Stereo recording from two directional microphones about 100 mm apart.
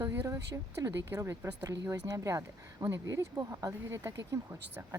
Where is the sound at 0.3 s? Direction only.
35° right (ahead or behind).